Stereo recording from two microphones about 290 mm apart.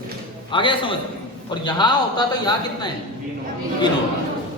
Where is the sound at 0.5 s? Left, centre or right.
Centre.